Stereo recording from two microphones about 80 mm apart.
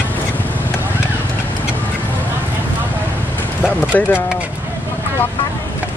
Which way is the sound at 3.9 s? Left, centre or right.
Left.